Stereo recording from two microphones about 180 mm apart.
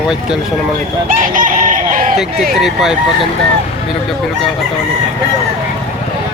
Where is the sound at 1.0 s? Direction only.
50° right (ahead or behind).